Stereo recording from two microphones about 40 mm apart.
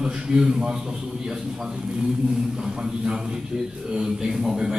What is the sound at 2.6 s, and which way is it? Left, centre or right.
A man's voice, centre.